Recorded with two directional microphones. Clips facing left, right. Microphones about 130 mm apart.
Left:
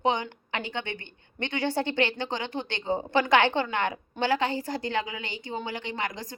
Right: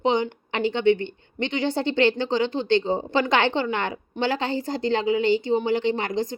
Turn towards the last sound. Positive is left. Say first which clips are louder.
# right 9 dB
turn(degrees=-25)  # may be behind; listen again after turning